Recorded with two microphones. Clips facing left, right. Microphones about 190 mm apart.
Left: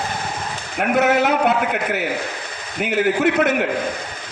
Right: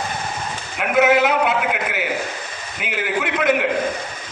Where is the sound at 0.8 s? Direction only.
40° left (ahead or behind).